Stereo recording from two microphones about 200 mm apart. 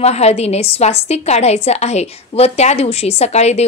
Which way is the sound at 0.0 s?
30° left (ahead or behind).